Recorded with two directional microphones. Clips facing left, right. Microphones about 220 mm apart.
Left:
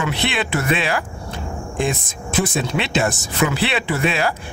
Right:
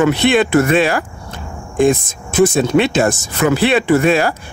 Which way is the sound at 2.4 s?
45° right (ahead or behind).